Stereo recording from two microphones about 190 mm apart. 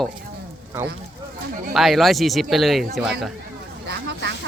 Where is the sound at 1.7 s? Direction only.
Centre (ahead or behind).